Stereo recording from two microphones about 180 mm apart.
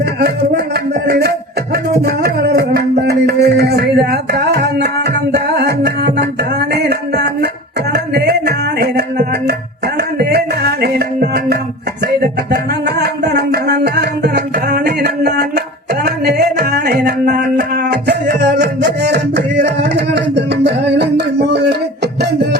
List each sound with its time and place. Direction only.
0.0 s music: 60° right (ahead or behind)
7.9 s a sound: 65° right (ahead or behind)
12.0 s music: 60° right (ahead or behind)